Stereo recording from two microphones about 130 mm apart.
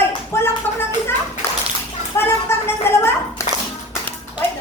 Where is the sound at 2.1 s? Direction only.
15° left (ahead or behind).